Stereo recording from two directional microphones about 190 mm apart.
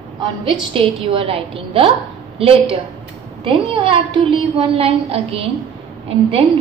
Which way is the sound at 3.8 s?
30° right (ahead or behind).